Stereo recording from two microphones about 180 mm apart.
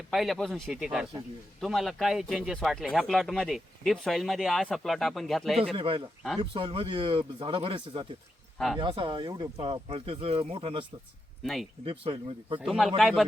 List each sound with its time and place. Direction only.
0.1 s speech: centre (ahead or behind)
5.7 s speech: 30° right (ahead or behind)
8.5 s speech: centre (ahead or behind)
8.8 s speech: 30° right (ahead or behind)
11.9 s speech: 30° right (ahead or behind)
12.5 s speech: centre (ahead or behind)